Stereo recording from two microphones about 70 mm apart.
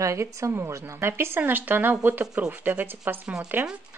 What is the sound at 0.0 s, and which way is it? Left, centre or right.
Speech, right.